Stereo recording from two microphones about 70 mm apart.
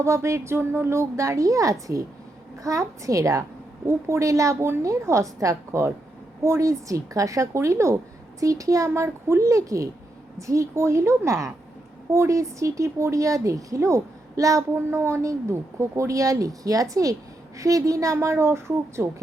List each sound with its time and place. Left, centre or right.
0.0 s a woman's voice: right
14.8 s a woman's voice: right